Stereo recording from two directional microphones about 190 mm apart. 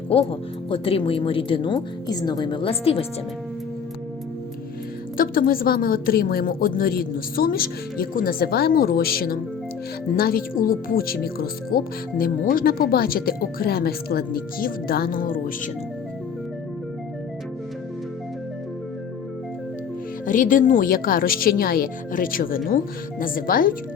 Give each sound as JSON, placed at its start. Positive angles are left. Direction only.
{"t": 0.1, "sound": "speech", "side_deg": 30}
{"t": 5.1, "sound": "a woman's voice", "side_deg": 50}
{"t": 20.2, "sound": "a woman's voice", "side_deg": 45}